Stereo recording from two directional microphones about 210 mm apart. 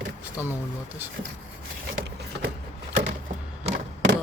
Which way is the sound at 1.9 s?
55° right (ahead or behind).